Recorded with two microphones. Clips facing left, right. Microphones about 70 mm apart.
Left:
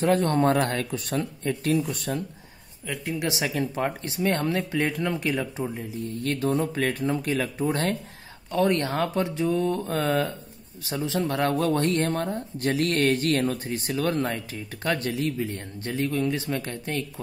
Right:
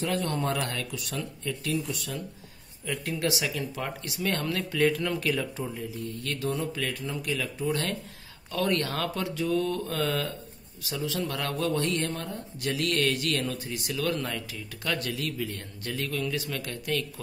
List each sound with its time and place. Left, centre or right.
0.0 s speech: left
2.9 s speech: centre
3.3 s speech: left